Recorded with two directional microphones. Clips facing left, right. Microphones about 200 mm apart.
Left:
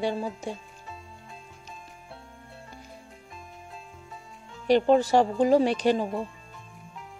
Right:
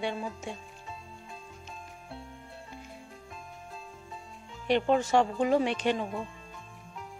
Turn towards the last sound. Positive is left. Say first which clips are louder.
# left 5 dB
turn(degrees=35)  # may be behind; listen again after turning